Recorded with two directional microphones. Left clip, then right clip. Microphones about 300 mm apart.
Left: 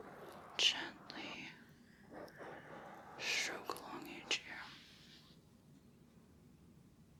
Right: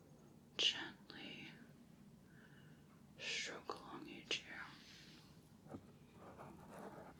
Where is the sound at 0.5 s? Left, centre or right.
Centre.